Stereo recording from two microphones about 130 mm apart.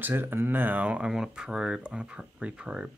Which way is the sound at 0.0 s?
15° right (ahead or behind).